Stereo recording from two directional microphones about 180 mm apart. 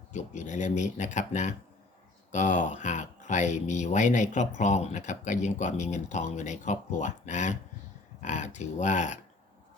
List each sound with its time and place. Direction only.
0.1 s speech: 40° left (ahead or behind)